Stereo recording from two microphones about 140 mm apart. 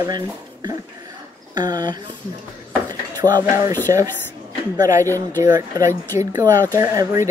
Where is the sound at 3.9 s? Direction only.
25° right (ahead or behind).